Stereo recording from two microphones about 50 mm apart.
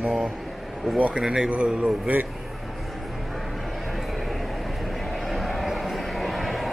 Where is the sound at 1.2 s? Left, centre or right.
Centre.